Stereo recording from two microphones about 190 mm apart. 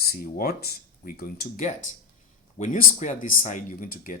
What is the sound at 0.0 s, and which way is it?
Speech, 50° left (ahead or behind).